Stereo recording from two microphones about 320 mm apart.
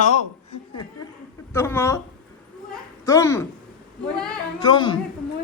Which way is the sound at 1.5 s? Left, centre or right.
Centre.